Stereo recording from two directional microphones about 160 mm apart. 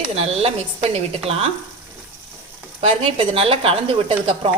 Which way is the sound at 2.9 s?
35° right (ahead or behind).